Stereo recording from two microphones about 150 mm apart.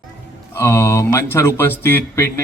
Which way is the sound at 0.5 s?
15° left (ahead or behind).